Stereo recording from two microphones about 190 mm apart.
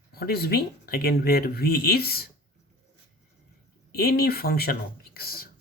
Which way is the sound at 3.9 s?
55° left (ahead or behind).